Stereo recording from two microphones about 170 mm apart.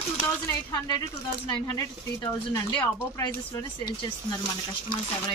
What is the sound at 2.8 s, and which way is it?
Speech, 20° left (ahead or behind).